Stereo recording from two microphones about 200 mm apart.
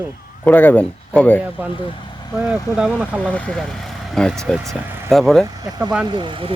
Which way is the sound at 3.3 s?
5° left (ahead or behind).